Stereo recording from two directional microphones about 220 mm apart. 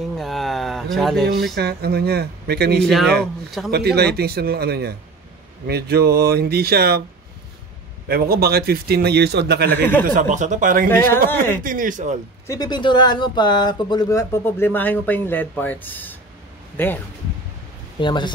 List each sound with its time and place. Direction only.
0.2 s a sound: centre (ahead or behind)
1.5 s a man's voice: 45° right (ahead or behind)
2.8 s speech: centre (ahead or behind)
3.7 s a man's voice: 45° right (ahead or behind)
8.1 s a man's voice: 45° right (ahead or behind)
10.0 s speech: 35° right (ahead or behind)
11.2 s speech: 10° left (ahead or behind)
11.6 s speech: 40° right (ahead or behind)
12.4 s speech: 20° left (ahead or behind)
18.0 s speech: 20° left (ahead or behind)